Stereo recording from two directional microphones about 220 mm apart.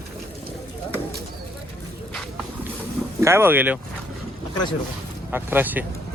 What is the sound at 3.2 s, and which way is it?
Speech, 10° right (ahead or behind).